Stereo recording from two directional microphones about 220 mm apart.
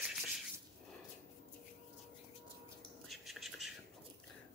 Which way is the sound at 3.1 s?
Centre (ahead or behind).